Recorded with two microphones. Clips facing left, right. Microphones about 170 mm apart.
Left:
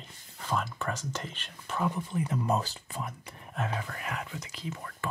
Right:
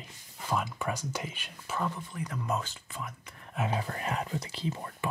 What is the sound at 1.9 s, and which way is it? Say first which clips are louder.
Speech: left 6 dB; 25° left (ahead or behind).